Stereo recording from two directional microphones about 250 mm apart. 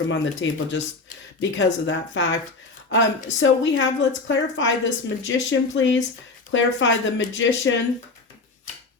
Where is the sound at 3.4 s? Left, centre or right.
Left.